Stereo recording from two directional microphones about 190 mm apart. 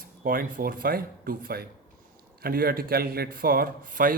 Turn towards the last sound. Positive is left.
turn(degrees=-45)  # may be behind; listen again after turning